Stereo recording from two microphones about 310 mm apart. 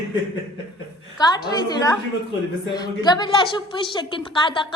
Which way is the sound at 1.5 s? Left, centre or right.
Centre.